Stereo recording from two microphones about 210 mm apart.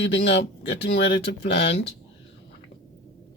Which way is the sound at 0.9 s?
50° left (ahead or behind).